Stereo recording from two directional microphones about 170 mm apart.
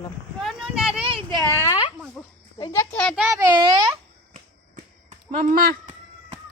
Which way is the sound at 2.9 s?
5° left (ahead or behind).